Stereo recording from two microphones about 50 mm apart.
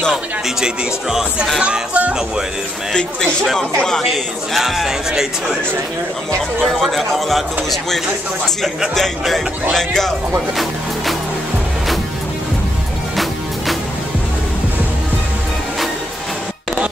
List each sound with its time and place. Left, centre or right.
1.6 s speech: right
2.9 s speech: centre
4.6 s speech: centre
6.6 s speech: centre
9.8 s speech: centre
13.1 s music: centre